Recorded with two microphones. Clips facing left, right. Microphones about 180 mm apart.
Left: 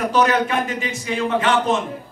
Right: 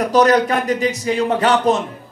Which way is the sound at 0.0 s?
40° right (ahead or behind).